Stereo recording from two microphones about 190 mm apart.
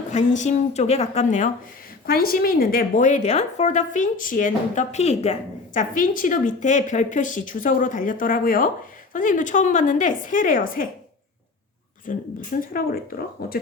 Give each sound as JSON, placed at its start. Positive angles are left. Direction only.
{"t": 0.1, "sound": "a woman's voice", "side_deg": 40}
{"t": 2.0, "sound": "a woman's voice", "side_deg": 50}
{"t": 12.1, "sound": "a woman's voice", "side_deg": 45}